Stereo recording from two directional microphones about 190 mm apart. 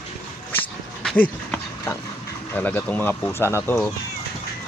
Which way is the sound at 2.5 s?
10° left (ahead or behind).